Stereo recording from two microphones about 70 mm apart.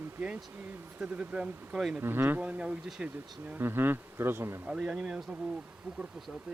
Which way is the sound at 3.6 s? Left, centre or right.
Right.